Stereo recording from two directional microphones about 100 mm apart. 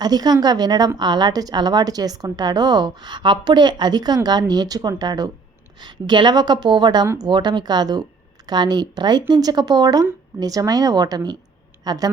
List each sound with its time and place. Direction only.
0.0 s a woman's voice: 45° right (ahead or behind)